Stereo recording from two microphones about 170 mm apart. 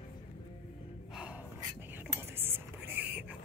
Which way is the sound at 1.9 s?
10° right (ahead or behind).